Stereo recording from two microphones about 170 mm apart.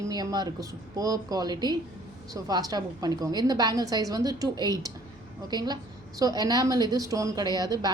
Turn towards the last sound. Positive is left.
turn(degrees=-25)  # may be behind; listen again after turning